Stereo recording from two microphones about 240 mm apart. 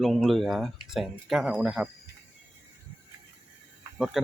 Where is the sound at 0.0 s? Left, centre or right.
Centre.